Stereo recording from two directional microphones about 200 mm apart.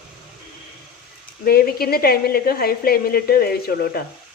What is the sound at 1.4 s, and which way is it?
A woman's voice, 50° left (ahead or behind).